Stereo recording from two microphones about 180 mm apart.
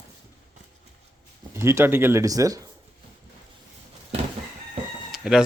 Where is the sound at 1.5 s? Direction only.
15° right (ahead or behind).